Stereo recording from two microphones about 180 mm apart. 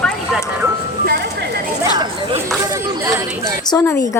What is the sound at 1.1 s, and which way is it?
Ice cream truck, 65° right (ahead or behind).